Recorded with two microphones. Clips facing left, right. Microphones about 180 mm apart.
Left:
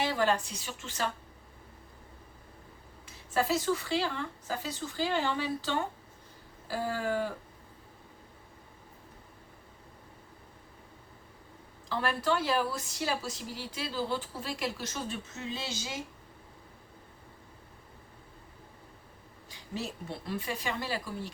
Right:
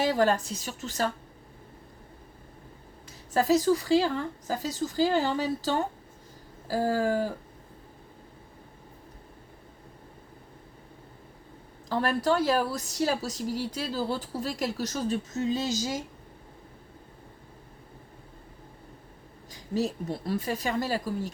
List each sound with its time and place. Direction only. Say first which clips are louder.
0.0 s a woman's voice: right 5 dB; 40° right (ahead or behind)
3.3 s a woman's voice: right 6 dB; 40° right (ahead or behind)
11.9 s a woman's voice: right 5 dB; 40° right (ahead or behind)
19.5 s a woman's voice: right 9 dB; 40° right (ahead or behind)